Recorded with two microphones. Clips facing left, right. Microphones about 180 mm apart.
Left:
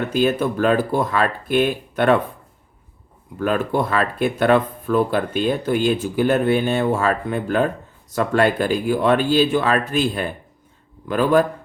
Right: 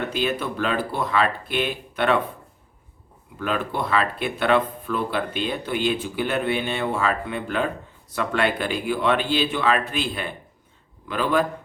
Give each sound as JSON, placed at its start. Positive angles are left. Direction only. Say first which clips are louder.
{"t": 0.1, "sound": "speech", "louder": "left 7 dB", "side_deg": 45}
{"t": 3.3, "sound": "speech", "louder": "left 6 dB", "side_deg": 45}